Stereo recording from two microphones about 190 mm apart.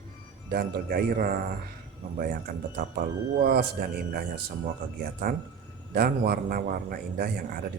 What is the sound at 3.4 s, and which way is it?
Speech, 50° right (ahead or behind).